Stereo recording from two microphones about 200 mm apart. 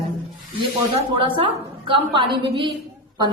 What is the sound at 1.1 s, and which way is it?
A woman's voice, 25° right (ahead or behind).